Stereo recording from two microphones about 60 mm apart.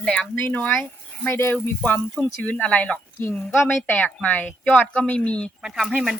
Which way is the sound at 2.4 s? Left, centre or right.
Centre.